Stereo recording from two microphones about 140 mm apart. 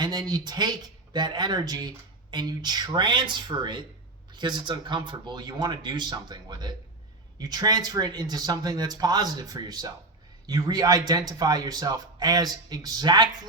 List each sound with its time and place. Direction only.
0.0 s a man's voice: 30° right (ahead or behind)